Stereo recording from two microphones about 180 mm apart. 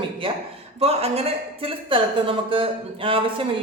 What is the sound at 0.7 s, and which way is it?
A man's voice, 35° right (ahead or behind).